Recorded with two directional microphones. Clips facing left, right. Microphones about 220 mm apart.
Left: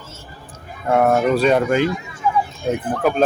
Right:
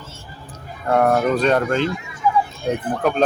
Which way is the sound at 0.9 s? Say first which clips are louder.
Left 1 dB; 5° left (ahead or behind).